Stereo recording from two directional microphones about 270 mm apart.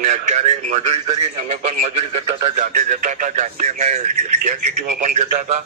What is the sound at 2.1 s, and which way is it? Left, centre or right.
A man's voice, right.